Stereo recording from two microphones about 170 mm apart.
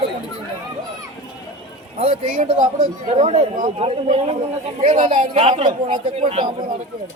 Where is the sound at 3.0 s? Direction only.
40° right (ahead or behind).